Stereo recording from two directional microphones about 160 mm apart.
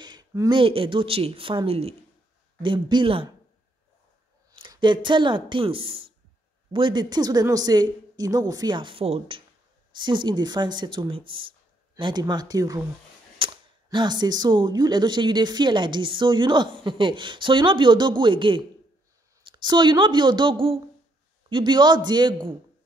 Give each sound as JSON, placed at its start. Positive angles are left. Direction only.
{"t": 0.0, "sound": "a sound", "side_deg": -25}
{"t": 0.6, "sound": "a woman's voice", "side_deg": -35}
{"t": 4.5, "sound": "speech", "side_deg": -30}